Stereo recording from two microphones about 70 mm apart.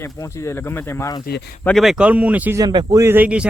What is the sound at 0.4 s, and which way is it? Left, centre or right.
Speech, left.